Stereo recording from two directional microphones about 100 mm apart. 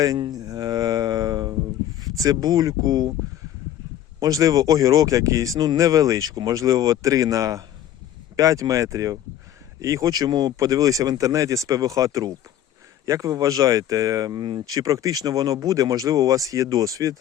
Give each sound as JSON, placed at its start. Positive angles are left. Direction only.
{"t": 0.2, "sound": "a sound", "side_deg": -40}
{"t": 2.0, "sound": "speech", "side_deg": -40}
{"t": 4.2, "sound": "speech", "side_deg": -35}